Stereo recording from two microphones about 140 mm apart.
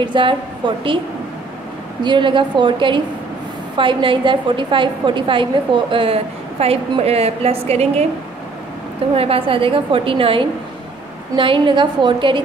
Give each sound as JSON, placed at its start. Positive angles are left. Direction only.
{"t": 0.0, "sound": "a woman's voice", "side_deg": -35}
{"t": 2.0, "sound": "a woman's voice", "side_deg": -35}
{"t": 9.1, "sound": "a woman's voice", "side_deg": -45}